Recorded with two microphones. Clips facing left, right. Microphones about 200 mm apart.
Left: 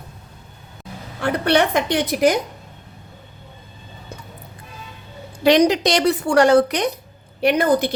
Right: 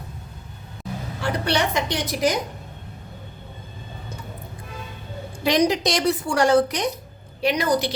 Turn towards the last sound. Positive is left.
turn(degrees=55)  # may be behind; listen again after turning